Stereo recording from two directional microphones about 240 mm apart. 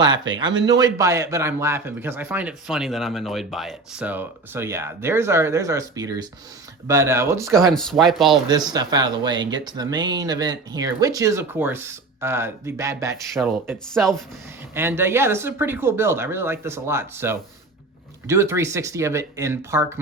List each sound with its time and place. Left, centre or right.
0.0 s speech: centre
7.5 s speech: centre
8.4 s speech: centre
13.3 s speech: centre
14.8 s speech: centre